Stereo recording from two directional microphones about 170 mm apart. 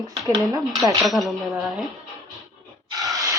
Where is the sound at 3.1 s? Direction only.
20° right (ahead or behind).